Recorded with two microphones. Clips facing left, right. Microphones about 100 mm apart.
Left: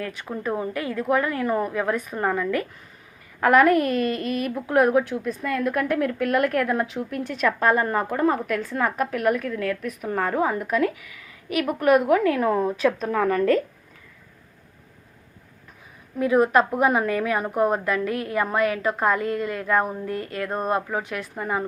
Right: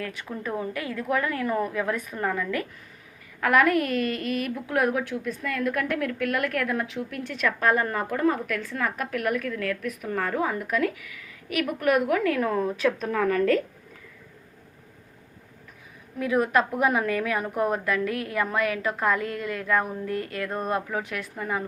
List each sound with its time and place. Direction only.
0.0 s a woman's voice: 30° left (ahead or behind)
16.1 s a woman's voice: 30° left (ahead or behind)